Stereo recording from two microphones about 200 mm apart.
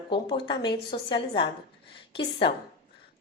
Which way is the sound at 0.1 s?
25° left (ahead or behind).